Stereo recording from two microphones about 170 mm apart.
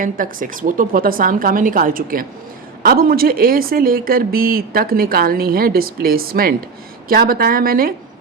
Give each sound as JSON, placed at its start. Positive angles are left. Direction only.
{"t": 0.0, "sound": "speech", "side_deg": -55}